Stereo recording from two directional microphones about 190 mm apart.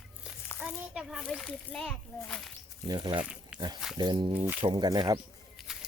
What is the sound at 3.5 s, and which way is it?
Wild animals, 5° right (ahead or behind).